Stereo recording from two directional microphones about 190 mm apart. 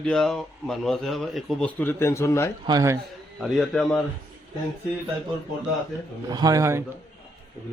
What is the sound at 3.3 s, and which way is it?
Speech, centre (ahead or behind).